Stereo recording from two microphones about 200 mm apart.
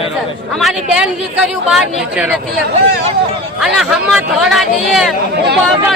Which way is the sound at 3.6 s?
Centre (ahead or behind).